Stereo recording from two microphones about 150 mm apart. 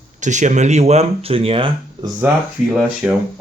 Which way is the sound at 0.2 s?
55° right (ahead or behind).